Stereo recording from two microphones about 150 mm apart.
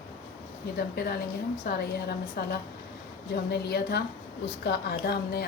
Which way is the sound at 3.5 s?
90° left.